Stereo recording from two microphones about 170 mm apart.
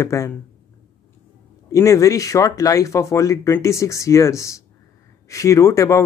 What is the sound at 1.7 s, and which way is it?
Speech, 20° left (ahead or behind).